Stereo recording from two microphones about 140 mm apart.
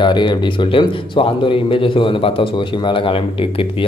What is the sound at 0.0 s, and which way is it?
Speech, 35° left (ahead or behind).